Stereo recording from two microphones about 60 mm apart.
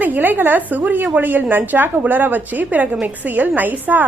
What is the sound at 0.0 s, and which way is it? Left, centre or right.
A woman's voice, right.